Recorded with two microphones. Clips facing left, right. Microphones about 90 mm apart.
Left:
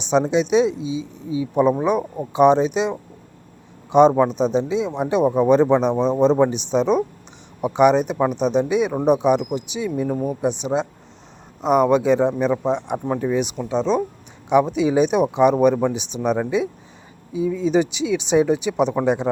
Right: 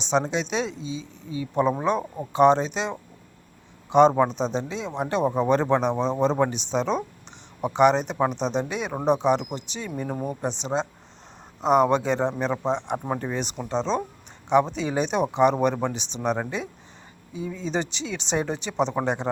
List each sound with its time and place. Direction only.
0.0 s speech: 15° left (ahead or behind)
10.1 s speech: centre (ahead or behind)
10.4 s speech: 10° left (ahead or behind)